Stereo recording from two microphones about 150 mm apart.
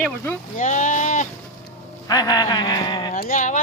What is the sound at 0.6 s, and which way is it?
Speech, 60° left (ahead or behind).